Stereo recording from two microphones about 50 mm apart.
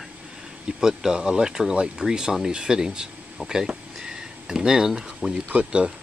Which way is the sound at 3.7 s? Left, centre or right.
Centre.